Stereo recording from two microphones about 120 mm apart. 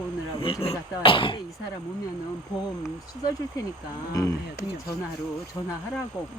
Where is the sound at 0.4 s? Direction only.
55° left (ahead or behind).